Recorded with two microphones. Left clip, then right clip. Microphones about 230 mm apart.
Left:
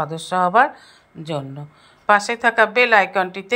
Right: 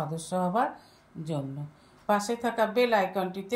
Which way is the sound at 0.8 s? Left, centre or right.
Centre.